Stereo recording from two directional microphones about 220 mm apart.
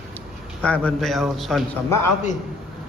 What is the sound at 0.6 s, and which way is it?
A man's voice, 5° left (ahead or behind).